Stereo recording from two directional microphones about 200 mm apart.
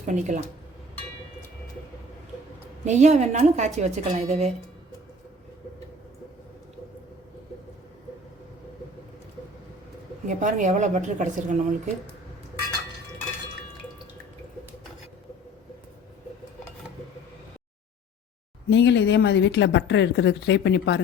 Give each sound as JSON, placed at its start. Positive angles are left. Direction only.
{"t": 0.0, "sound": "a woman's voice", "side_deg": -35}
{"t": 2.8, "sound": "a woman's voice", "side_deg": -35}
{"t": 10.2, "sound": "a woman's voice", "side_deg": -40}
{"t": 18.7, "sound": "speech", "side_deg": 60}